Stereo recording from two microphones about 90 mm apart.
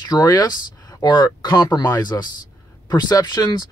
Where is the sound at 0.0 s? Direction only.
50° left (ahead or behind).